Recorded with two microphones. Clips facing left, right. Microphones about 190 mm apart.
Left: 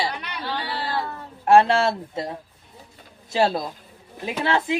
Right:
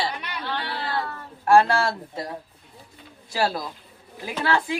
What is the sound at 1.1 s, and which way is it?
A woman's voice, 20° left (ahead or behind).